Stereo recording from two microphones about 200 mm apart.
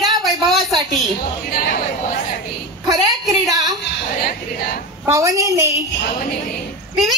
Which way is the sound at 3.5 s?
20° right (ahead or behind).